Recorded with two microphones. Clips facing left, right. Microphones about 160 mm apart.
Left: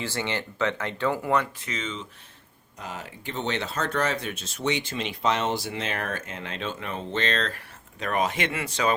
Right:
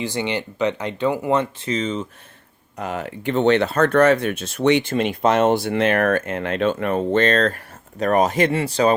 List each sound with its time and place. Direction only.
0.0 s speech: 15° right (ahead or behind); by 2.0 s 40° right (ahead or behind)
2.7 s speech: 60° right (ahead or behind); by 9.0 s 35° right (ahead or behind)